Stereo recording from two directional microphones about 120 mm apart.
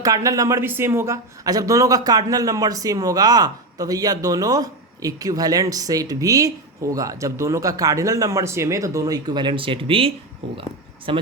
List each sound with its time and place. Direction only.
0.0 s speech: 30° right (ahead or behind); by 11.2 s 45° right (ahead or behind)